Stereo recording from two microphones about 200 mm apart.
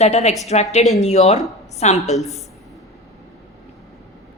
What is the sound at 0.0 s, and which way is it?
Speech, 35° left (ahead or behind).